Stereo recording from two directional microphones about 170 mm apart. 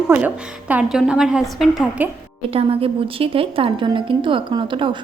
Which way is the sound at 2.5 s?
35° right (ahead or behind).